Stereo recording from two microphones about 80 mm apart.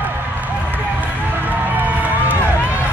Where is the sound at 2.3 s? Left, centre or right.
Left.